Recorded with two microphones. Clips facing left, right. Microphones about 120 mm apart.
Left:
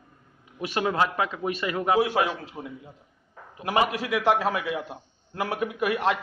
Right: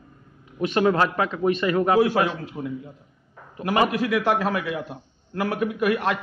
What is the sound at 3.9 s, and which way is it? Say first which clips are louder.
A man's voice: right 2 dB; 20° left (ahead or behind).